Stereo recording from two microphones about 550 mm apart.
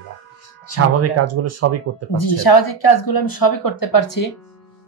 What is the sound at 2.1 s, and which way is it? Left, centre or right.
Speech, left.